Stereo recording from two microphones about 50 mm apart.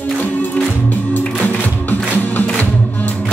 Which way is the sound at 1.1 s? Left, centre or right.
Left.